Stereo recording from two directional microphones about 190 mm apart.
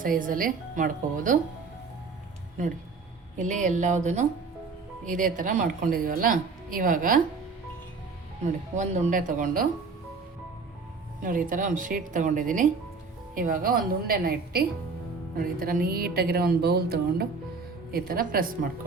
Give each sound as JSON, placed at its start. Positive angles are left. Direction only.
{"t": 0.0, "sound": "speech", "side_deg": -45}
{"t": 3.3, "sound": "speech", "side_deg": -40}
{"t": 8.7, "sound": "speech", "side_deg": -40}
{"t": 11.2, "sound": "speech", "side_deg": -45}